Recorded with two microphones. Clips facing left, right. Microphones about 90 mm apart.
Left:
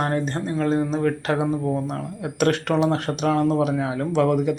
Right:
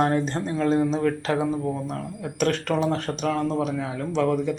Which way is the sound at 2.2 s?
75° left (ahead or behind).